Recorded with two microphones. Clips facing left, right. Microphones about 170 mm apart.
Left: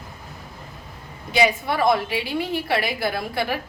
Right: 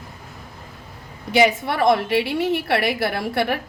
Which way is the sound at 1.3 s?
65° right (ahead or behind).